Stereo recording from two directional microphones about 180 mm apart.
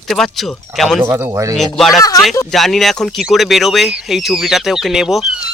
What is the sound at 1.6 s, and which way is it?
Speech, centre (ahead or behind).